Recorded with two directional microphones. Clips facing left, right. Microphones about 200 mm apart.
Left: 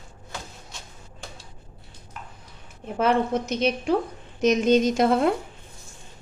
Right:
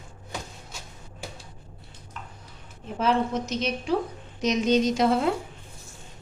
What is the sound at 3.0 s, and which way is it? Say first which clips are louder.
A woman's voice: left 2 dB; 55° left (ahead or behind).